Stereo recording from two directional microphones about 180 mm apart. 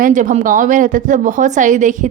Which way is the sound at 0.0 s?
45° right (ahead or behind).